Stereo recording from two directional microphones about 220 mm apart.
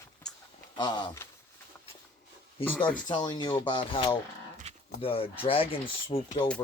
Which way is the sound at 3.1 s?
20° left (ahead or behind).